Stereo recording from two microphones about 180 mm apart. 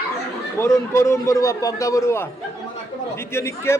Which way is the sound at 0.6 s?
15° left (ahead or behind).